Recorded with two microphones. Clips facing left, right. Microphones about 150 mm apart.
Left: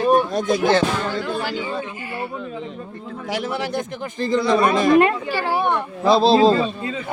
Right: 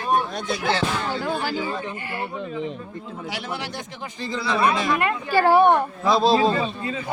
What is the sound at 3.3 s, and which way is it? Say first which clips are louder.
Speech: left 9 dB; 45° left (ahead or behind).